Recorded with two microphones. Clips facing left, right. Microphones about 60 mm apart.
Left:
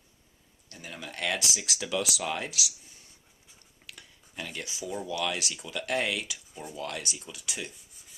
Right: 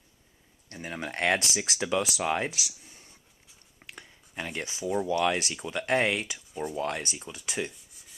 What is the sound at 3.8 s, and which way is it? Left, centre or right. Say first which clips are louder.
Speech: right 3 dB; right.